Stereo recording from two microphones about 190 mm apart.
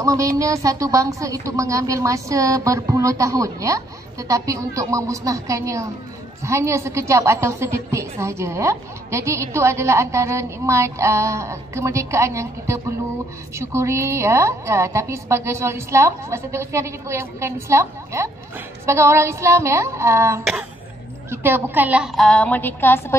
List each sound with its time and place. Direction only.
0.0 s a woman's voice: 15° right (ahead or behind); by 23.1 s 10° left (ahead or behind)